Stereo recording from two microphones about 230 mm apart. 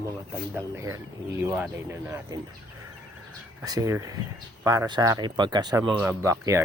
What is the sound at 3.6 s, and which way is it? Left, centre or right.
Speech, centre.